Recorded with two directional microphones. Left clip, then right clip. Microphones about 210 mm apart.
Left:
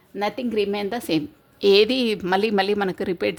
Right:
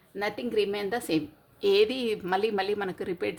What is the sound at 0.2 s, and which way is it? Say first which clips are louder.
A woman's voice: left 4 dB; 35° left (ahead or behind).